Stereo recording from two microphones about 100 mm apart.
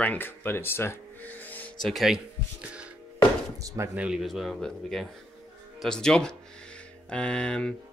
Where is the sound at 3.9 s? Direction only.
10° right (ahead or behind); by 7.7 s 10° left (ahead or behind).